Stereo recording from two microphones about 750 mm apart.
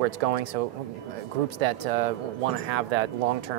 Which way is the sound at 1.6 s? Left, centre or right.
Right.